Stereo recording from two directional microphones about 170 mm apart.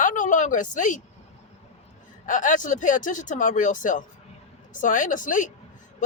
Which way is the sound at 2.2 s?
50° left (ahead or behind).